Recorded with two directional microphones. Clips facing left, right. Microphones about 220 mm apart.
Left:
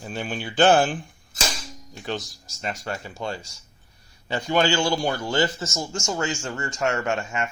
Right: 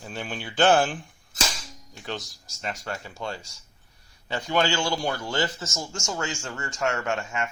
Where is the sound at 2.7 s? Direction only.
15° left (ahead or behind).